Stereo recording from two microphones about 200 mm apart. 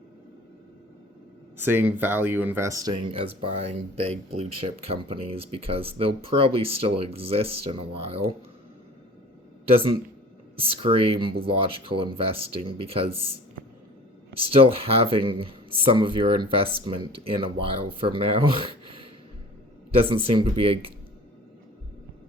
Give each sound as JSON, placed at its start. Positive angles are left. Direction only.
{"t": 1.5, "sound": "speech", "side_deg": -10}
{"t": 10.6, "sound": "speech", "side_deg": -25}
{"t": 14.5, "sound": "speech", "side_deg": -30}